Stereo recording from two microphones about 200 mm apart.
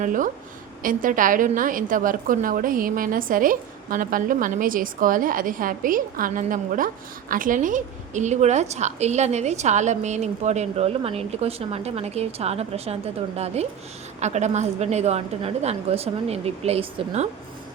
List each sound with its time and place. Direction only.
0.0 s a woman's voice: 40° right (ahead or behind)